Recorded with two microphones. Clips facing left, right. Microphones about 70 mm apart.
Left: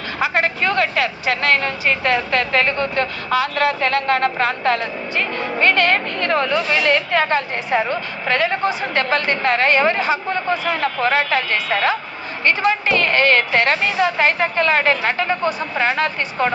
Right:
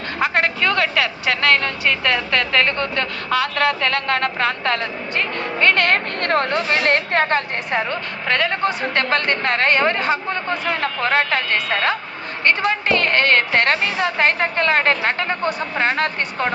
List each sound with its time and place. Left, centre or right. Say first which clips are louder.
0.2 s a man's voice: even; right